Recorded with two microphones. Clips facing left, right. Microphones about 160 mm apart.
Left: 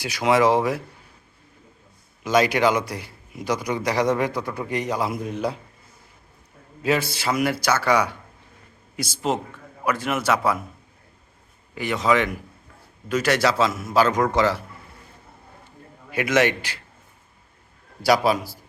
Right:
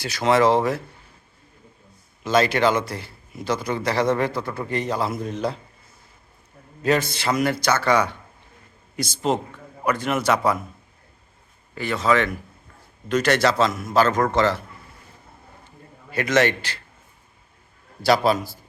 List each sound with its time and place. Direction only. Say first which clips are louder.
0.0 s a man's voice: right 1 dB; 10° left (ahead or behind)
2.2 s a man's voice: even; 15° left (ahead or behind)
6.8 s a man's voice: right 1 dB; 5° left (ahead or behind)
11.7 s a man's voice: even; 15° left (ahead or behind)
16.1 s a man's voice: even; 10° left (ahead or behind)
18.0 s a man's voice: even; 10° left (ahead or behind)